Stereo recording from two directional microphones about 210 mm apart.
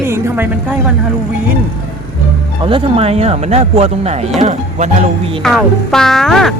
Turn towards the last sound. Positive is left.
turn(degrees=0)  # may be behind; listen again after turning